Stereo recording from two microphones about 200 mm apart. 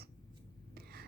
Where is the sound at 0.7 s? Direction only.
50° right (ahead or behind).